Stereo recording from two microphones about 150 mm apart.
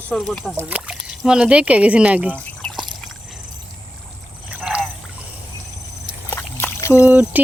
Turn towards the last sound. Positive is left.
turn(degrees=-10)  # may be behind; listen again after turning